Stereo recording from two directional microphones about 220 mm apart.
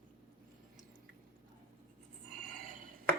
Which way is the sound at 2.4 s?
40° right (ahead or behind).